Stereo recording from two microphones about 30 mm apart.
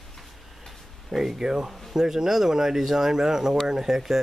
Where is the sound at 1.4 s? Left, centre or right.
Right.